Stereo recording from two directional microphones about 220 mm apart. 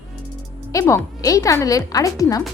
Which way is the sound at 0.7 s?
15° left (ahead or behind).